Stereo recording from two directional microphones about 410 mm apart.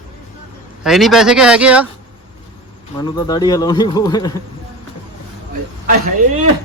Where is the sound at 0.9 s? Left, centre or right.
Centre.